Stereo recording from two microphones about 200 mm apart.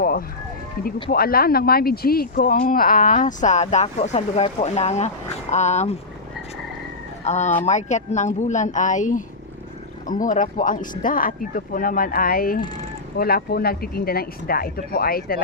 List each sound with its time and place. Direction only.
0.0 s a sound: 45° left (ahead or behind)
1.1 s speech: 50° left (ahead or behind)
7.3 s speech: 35° left (ahead or behind)